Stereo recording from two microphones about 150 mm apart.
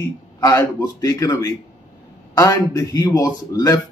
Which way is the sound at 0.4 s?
25° left (ahead or behind).